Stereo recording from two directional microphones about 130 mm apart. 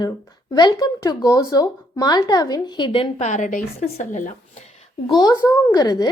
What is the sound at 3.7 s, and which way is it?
Speech, 55° left (ahead or behind).